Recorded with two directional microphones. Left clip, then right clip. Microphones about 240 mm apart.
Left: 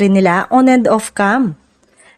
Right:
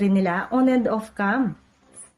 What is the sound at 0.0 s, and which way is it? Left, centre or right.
Speech, left.